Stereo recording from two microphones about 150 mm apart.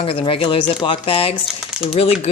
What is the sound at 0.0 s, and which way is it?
Speech, 40° left (ahead or behind).